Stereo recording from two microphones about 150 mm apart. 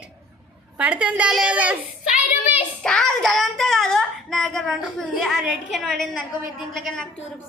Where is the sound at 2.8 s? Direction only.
5° left (ahead or behind).